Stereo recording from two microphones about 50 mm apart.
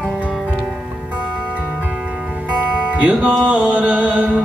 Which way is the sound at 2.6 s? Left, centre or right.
Right.